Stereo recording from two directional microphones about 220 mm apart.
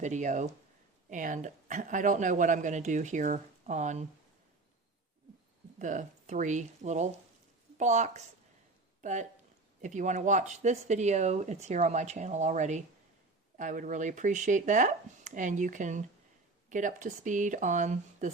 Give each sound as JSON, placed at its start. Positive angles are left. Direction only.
{"t": 0.0, "sound": "speech", "side_deg": -35}
{"t": 5.8, "sound": "speech", "side_deg": -35}
{"t": 9.0, "sound": "a sound", "side_deg": -35}
{"t": 9.8, "sound": "speech", "side_deg": -35}